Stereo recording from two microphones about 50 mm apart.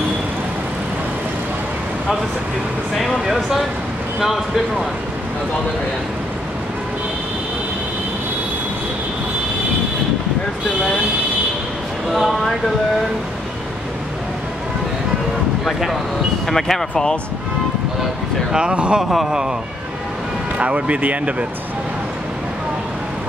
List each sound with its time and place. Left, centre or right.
3.3 s speech: centre
12.1 s speech: centre
15.6 s speech: centre
18.5 s speech: right
19.0 s speech: centre
20.5 s speech: right